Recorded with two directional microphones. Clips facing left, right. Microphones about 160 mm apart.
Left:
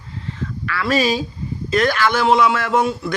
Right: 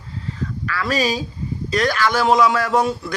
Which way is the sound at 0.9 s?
40° right (ahead or behind).